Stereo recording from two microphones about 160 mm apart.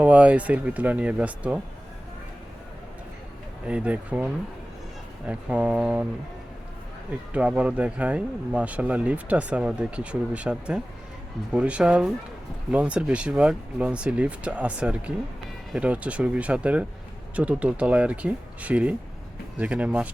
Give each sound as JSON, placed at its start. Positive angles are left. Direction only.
{"t": 0.0, "sound": "speech", "side_deg": -10}
{"t": 3.7, "sound": "speech", "side_deg": -5}
{"t": 5.3, "sound": "speech", "side_deg": -5}
{"t": 7.3, "sound": "speech", "side_deg": -5}